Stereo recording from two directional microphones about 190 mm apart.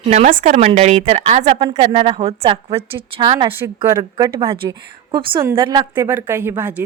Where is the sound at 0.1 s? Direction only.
35° right (ahead or behind).